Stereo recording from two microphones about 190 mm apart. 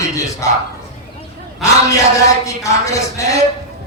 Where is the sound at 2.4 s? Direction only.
15° left (ahead or behind).